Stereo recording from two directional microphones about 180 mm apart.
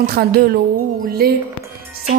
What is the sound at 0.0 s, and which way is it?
Music, 60° right (ahead or behind).